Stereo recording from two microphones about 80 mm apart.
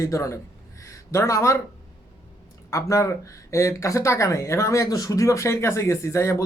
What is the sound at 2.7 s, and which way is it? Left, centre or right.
A man's voice, left.